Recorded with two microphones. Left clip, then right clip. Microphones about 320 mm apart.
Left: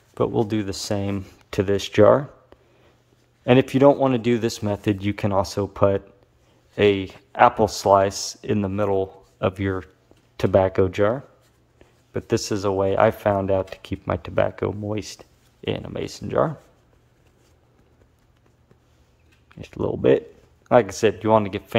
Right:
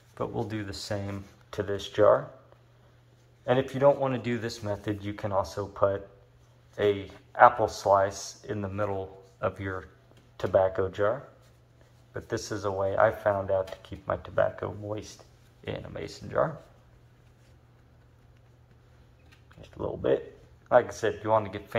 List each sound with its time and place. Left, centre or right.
0.2 s speech: left
3.4 s speech: left
19.6 s speech: left